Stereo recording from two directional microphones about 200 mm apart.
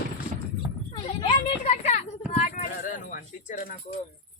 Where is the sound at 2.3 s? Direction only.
35° left (ahead or behind).